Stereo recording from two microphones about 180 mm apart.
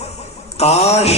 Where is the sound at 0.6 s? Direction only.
35° left (ahead or behind).